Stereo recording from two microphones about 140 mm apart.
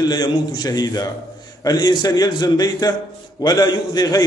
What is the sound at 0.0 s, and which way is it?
A man's voice, 30° left (ahead or behind).